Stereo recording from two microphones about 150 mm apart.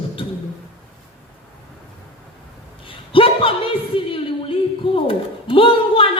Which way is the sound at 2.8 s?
35° left (ahead or behind).